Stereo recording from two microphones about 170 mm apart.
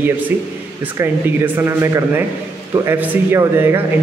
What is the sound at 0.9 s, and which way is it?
A man's voice, 15° right (ahead or behind).